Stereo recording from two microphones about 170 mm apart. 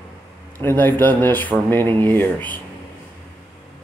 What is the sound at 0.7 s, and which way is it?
Speech, 10° left (ahead or behind).